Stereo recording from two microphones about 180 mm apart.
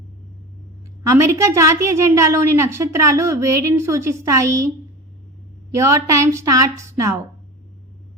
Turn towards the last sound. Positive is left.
turn(degrees=-15)  # may be behind; listen again after turning